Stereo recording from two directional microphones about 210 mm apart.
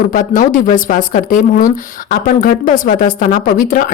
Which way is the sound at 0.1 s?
40° left (ahead or behind).